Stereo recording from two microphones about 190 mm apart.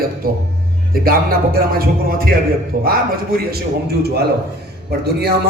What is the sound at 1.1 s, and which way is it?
A man's voice, 50° right (ahead or behind).